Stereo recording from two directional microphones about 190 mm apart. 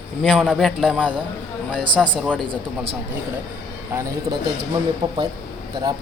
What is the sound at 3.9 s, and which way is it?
Speech, 15° right (ahead or behind).